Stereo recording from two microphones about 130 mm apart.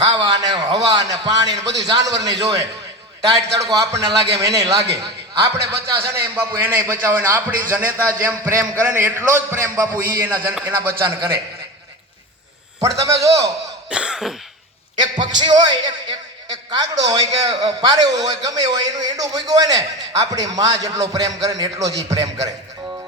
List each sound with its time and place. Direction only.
0.0 s a man's voice: 30° right (ahead or behind)
11.0 s a man's voice: 30° right (ahead or behind)
13.1 s speech: 25° right (ahead or behind)
13.9 s cough: 5° right (ahead or behind)
15.1 s speech: 35° right (ahead or behind)